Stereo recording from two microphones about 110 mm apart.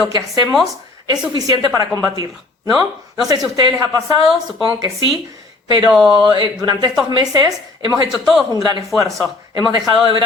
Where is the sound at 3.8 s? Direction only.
35° right (ahead or behind).